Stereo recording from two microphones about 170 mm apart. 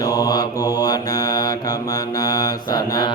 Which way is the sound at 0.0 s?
20° left (ahead or behind).